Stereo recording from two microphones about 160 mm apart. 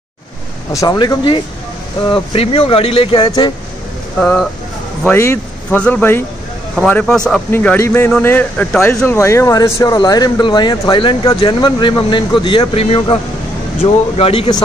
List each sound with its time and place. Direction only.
0.7 s speech: 25° left (ahead or behind)
4.2 s speech: 5° left (ahead or behind)
5.0 s speech: 15° left (ahead or behind); by 14.6 s 35° left (ahead or behind)